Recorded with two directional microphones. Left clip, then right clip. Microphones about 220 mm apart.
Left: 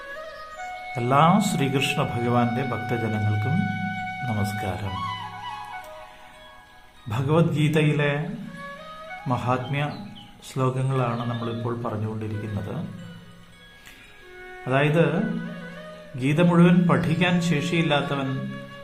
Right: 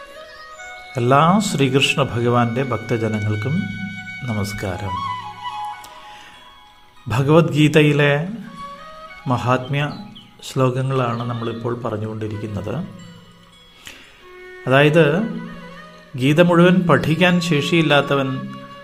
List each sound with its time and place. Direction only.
0.9 s speech: 20° right (ahead or behind)
4.9 s music: 5° left (ahead or behind)
7.1 s speech: 25° right (ahead or behind)
9.2 s speech: 25° right (ahead or behind)
14.6 s speech: 25° right (ahead or behind)
16.1 s speech: 25° right (ahead or behind)